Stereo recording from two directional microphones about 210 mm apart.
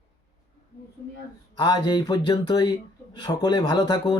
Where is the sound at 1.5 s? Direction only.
20° left (ahead or behind).